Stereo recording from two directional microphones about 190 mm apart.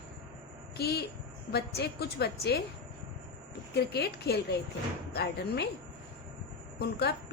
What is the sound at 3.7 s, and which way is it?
A woman's voice, 60° left (ahead or behind).